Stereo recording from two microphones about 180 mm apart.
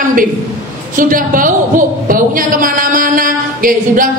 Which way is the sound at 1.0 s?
50° right (ahead or behind).